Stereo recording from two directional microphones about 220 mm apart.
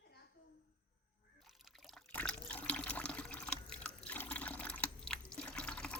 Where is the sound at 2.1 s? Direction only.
5° left (ahead or behind).